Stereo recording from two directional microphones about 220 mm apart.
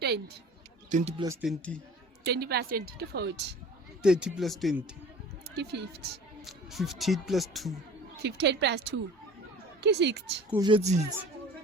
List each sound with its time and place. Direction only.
0.9 s speech: 35° right (ahead or behind)
1.4 s speech: centre (ahead or behind)
2.2 s a woman's voice: 45° right (ahead or behind)
4.0 s speech: 5° right (ahead or behind)
5.5 s a woman's voice: 50° right (ahead or behind)
6.4 s speech: centre (ahead or behind)
8.2 s a woman's voice: 50° right (ahead or behind)
10.5 s speech: 20° right (ahead or behind)